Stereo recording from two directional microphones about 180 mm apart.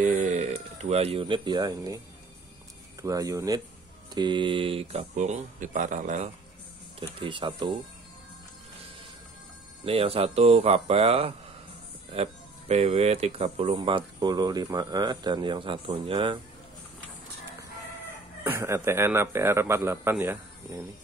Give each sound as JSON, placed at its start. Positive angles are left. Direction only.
{"t": 0.0, "sound": "speech", "side_deg": -45}
{"t": 3.0, "sound": "speech", "side_deg": -20}
{"t": 7.0, "sound": "speech", "side_deg": -25}
{"t": 9.8, "sound": "speech", "side_deg": -35}
{"t": 18.4, "sound": "a man's voice", "side_deg": -15}